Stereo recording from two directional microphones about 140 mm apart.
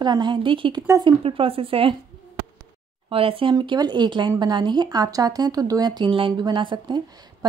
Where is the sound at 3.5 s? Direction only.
30° right (ahead or behind).